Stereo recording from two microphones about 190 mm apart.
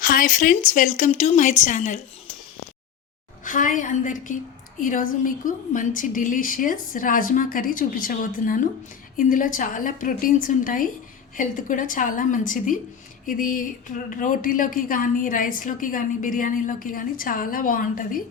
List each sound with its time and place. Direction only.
0.0 s speech: 45° left (ahead or behind)
3.4 s a woman's voice: 45° left (ahead or behind)